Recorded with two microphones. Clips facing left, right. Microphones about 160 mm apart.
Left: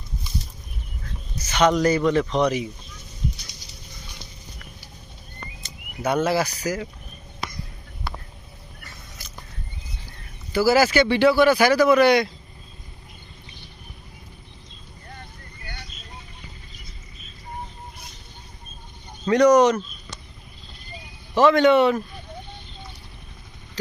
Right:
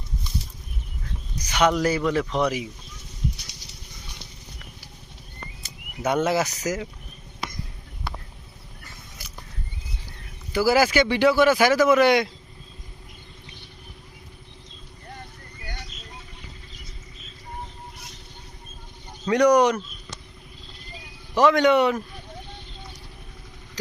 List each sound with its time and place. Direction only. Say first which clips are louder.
1.4 s speech: left 2 dB; 10° right (ahead or behind)
6.1 s speech: left 1 dB; 20° right (ahead or behind)
10.5 s speech: left 2 dB; 15° right (ahead or behind)
19.2 s speech: left 2 dB; 10° right (ahead or behind)
21.3 s speech: left 2 dB; 15° right (ahead or behind)
23.8 s a sound: left 3 dB; 10° right (ahead or behind)